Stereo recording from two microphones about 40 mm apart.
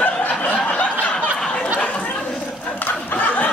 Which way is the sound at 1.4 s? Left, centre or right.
Left.